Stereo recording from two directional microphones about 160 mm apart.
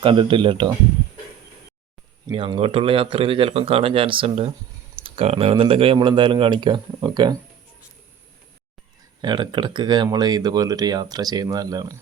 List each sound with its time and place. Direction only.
0.0 s speech: 30° right (ahead or behind)
2.2 s speech: 30° right (ahead or behind)
9.2 s speech: 30° right (ahead or behind)